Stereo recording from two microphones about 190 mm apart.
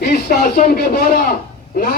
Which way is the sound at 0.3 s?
50° left (ahead or behind).